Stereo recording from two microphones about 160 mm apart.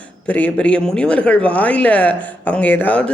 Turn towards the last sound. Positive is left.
turn(degrees=10)  # may be behind; listen again after turning